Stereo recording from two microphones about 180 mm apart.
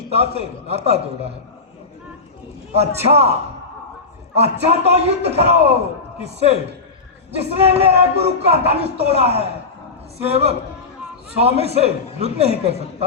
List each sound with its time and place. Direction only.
0.1 s speech: 35° right (ahead or behind)
2.7 s speech: 35° right (ahead or behind)
4.4 s speech: 35° right (ahead or behind)